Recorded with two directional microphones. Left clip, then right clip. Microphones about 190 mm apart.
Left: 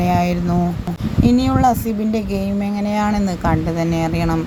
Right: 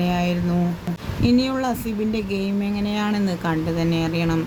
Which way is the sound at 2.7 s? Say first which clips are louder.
Left 8 dB; 10° left (ahead or behind).